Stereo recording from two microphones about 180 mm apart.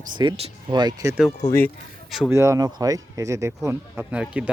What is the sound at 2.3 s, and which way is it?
Speech, 15° right (ahead or behind).